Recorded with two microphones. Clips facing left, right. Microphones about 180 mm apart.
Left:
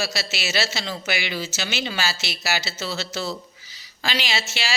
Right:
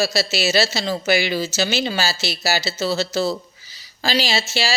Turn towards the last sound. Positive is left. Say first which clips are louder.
# right 6 dB
turn(degrees=-35)  # may be behind; listen again after turning